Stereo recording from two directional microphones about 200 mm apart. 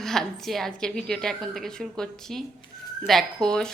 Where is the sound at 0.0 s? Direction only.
Centre (ahead or behind).